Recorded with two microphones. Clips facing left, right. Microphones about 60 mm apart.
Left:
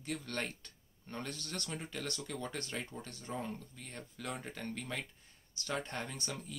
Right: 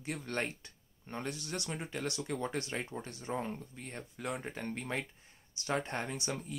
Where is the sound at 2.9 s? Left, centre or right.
Centre.